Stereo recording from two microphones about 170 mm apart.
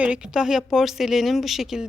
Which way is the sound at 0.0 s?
5° right (ahead or behind).